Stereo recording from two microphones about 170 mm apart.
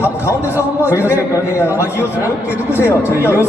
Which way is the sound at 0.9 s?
15° left (ahead or behind).